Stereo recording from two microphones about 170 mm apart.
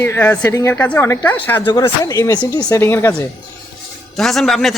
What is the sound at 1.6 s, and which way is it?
A man's voice, 25° left (ahead or behind).